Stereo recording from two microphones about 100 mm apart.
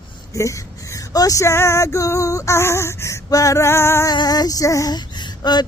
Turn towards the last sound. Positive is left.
turn(degrees=45)  # may be behind; listen again after turning